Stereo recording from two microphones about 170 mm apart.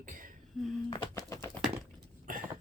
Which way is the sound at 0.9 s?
20° left (ahead or behind).